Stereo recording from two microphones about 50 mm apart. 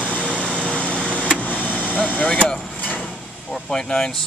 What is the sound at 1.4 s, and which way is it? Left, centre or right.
Vehicle, left.